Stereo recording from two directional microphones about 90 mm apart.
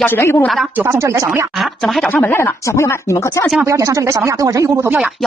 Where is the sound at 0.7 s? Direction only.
30° right (ahead or behind).